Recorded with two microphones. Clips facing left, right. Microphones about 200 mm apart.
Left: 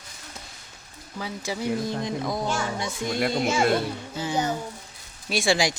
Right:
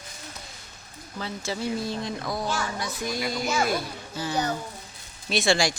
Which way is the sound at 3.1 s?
55° left (ahead or behind).